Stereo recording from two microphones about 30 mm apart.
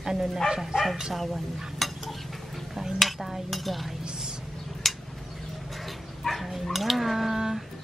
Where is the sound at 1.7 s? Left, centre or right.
Centre.